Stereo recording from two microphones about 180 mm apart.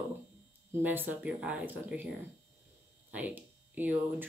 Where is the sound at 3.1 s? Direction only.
10° right (ahead or behind).